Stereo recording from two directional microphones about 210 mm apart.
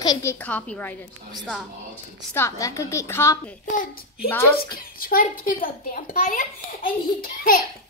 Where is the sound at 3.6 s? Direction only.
40° left (ahead or behind).